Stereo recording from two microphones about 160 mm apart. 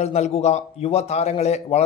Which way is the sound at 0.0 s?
40° left (ahead or behind).